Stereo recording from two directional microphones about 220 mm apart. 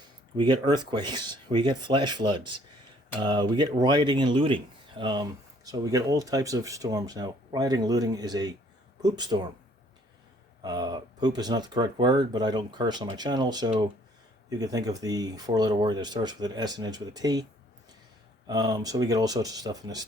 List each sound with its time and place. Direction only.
0.3 s speech: 20° right (ahead or behind)
10.6 s speech: 20° right (ahead or behind)
18.4 s speech: 20° right (ahead or behind)